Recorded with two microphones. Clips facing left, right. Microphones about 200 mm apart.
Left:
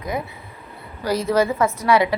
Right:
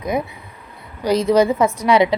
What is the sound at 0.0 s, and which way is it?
A woman's voice, 20° right (ahead or behind).